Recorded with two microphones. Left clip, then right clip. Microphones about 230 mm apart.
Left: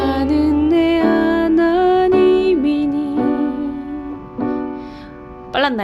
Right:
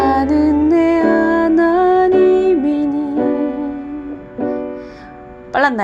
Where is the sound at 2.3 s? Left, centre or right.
Centre.